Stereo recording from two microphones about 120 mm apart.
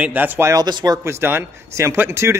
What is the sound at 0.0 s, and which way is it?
Speech, 15° right (ahead or behind).